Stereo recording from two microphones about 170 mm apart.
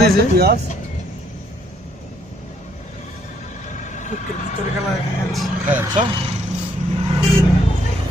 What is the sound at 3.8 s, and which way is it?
Vehicle, 45° left (ahead or behind).